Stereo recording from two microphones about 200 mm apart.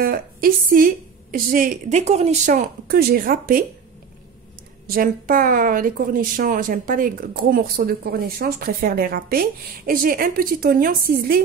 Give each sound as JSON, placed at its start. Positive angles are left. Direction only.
{"t": 0.0, "sound": "a woman's voice", "side_deg": -50}
{"t": 4.8, "sound": "a woman's voice", "side_deg": -45}